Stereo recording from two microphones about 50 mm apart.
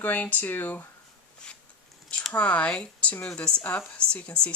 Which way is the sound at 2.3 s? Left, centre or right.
Left.